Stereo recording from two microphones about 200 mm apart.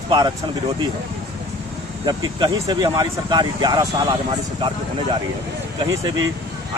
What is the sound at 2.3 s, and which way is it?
Speech, 20° right (ahead or behind).